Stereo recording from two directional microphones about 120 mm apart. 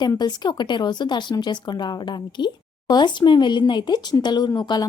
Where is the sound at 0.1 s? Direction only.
35° left (ahead or behind).